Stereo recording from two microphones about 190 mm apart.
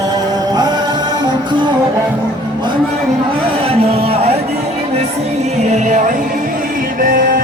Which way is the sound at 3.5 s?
30° right (ahead or behind).